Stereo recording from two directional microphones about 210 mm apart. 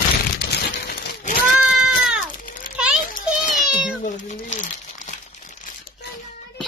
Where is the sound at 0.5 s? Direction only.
50° left (ahead or behind).